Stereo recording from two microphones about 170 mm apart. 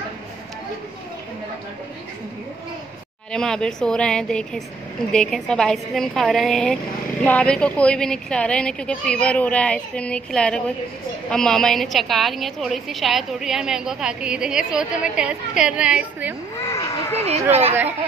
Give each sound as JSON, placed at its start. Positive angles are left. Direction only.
{"t": 3.3, "sound": "a woman's voice", "side_deg": 5}
{"t": 16.5, "sound": "speech", "side_deg": 15}
{"t": 17.5, "sound": "speech", "side_deg": -35}